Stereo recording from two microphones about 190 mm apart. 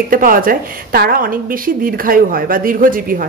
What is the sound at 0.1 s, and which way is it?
A woman's voice, 50° right (ahead or behind).